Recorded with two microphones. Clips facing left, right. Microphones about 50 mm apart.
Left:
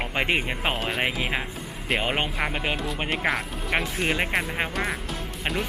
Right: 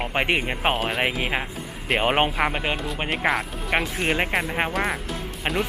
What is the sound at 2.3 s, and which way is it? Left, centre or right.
Speech, centre.